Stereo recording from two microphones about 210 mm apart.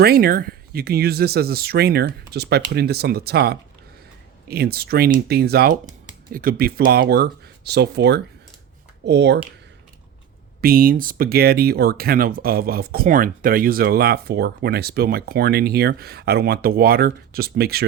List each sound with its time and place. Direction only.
0.0 s speech: 45° right (ahead or behind)
10.6 s speech: 45° right (ahead or behind)